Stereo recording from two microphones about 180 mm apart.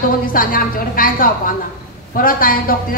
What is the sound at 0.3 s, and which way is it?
A woman's voice, 50° left (ahead or behind).